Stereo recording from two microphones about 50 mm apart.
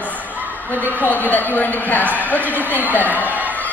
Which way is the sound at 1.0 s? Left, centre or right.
Left.